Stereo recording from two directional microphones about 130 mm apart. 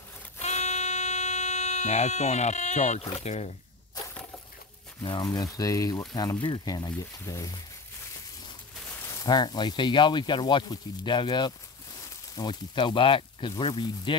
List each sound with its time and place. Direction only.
0.4 s a sound: 60° left (ahead or behind)
3.0 s speech: 50° left (ahead or behind)
5.0 s speech: 35° left (ahead or behind)
9.0 s speech: 30° left (ahead or behind)